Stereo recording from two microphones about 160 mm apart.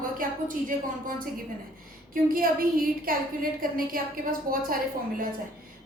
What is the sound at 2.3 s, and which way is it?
A woman's voice, 65° right (ahead or behind).